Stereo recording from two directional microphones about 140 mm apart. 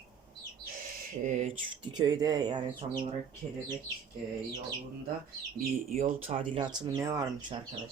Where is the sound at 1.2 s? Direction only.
65° right (ahead or behind).